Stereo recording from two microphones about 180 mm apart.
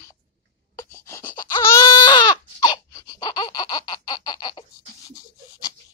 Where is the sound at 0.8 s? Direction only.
15° left (ahead or behind).